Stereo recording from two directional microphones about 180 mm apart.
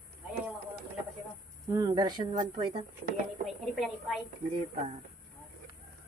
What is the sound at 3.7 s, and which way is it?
Speech, centre (ahead or behind).